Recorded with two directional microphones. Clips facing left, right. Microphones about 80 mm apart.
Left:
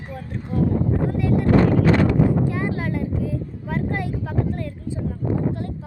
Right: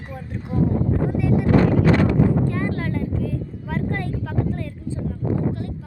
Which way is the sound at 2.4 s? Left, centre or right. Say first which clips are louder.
Even; centre.